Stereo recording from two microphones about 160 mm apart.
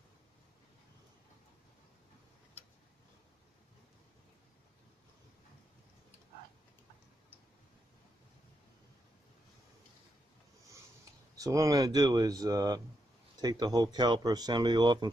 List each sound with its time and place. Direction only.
11.3 s speech: 20° right (ahead or behind)